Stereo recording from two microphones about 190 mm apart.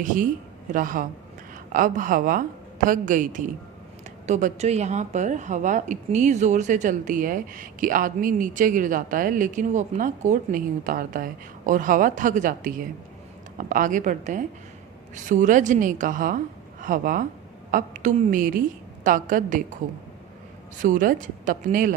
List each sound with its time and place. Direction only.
0.0 s a woman's voice: 45° right (ahead or behind)
20.7 s a woman's voice: 45° right (ahead or behind)